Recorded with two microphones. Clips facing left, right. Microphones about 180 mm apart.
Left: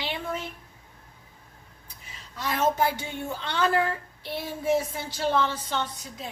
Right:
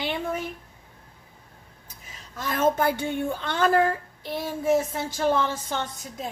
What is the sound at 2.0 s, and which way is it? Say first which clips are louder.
A woman's voice: even; 50° right (ahead or behind).